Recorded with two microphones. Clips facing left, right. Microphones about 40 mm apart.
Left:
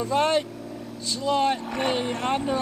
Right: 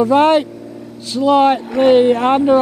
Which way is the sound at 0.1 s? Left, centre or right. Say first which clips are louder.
Right 11 dB; right.